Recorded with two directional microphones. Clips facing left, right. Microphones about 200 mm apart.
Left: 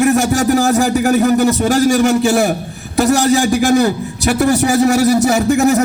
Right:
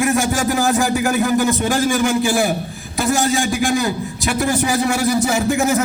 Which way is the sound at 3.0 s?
70° left (ahead or behind).